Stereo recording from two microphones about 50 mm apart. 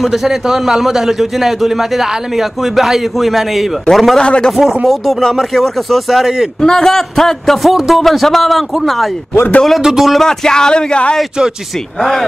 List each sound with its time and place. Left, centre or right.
0.0 s a man's voice: centre
4.2 s a man's voice: centre
4.5 s a man's voice: centre
6.6 s a man's voice: centre
7.7 s a man's voice: centre
8.0 s a man's voice: centre
10.1 s a man's voice: centre
12.0 s a man's voice: centre